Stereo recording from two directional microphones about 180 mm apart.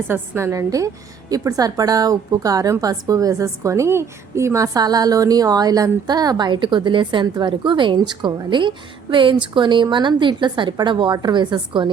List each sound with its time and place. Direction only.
0.1 s a woman's voice: 15° right (ahead or behind)